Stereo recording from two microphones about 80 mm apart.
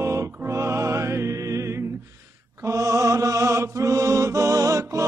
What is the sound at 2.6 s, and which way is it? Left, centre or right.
Mantra, right.